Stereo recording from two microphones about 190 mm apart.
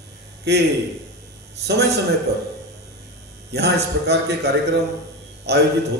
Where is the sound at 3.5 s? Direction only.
60° right (ahead or behind).